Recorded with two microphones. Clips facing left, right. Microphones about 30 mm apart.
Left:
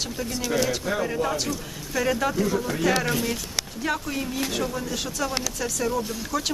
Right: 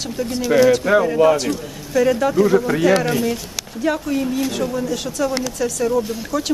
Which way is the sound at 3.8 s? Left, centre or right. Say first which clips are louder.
Right 9 dB; centre.